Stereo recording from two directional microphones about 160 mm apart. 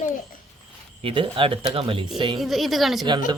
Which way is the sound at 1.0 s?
35° right (ahead or behind).